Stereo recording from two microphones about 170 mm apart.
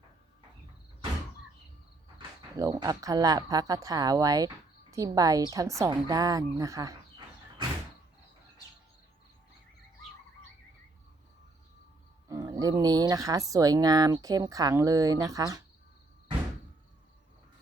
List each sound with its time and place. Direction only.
2.1 s speech: 25° right (ahead or behind)
12.3 s speech: 20° right (ahead or behind)